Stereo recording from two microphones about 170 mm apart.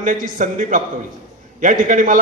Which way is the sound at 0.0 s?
50° right (ahead or behind).